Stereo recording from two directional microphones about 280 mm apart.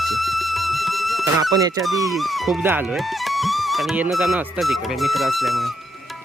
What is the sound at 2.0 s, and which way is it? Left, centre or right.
Speech, centre.